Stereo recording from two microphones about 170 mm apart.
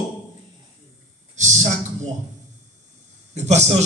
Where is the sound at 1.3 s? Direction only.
45° right (ahead or behind).